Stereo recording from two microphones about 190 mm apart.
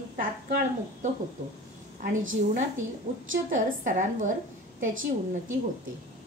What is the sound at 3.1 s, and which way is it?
Speech, 25° right (ahead or behind).